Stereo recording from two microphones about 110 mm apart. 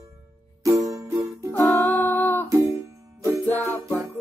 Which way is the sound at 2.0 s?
20° left (ahead or behind).